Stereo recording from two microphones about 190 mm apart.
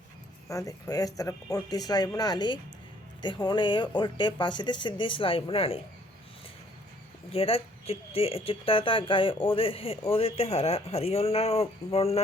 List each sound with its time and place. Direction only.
0.4 s speech: 15° left (ahead or behind)
7.3 s speech: 30° left (ahead or behind)